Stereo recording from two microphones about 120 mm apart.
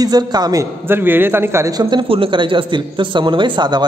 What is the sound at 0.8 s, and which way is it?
A man's voice, 15° right (ahead or behind).